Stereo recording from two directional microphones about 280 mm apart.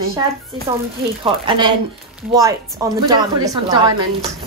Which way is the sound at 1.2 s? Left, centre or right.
Centre.